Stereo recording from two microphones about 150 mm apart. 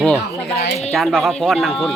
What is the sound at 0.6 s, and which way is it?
Speech, 45° left (ahead or behind).